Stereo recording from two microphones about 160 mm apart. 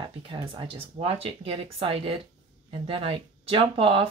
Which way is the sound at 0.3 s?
35° right (ahead or behind).